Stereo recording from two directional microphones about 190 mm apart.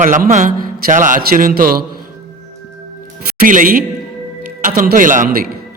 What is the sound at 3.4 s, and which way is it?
Speech, 45° right (ahead or behind).